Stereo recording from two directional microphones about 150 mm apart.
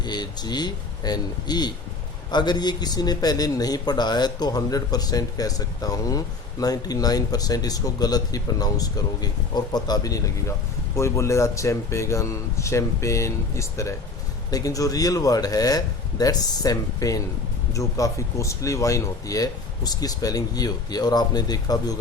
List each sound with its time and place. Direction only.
0.0 s a man's voice: 30° left (ahead or behind)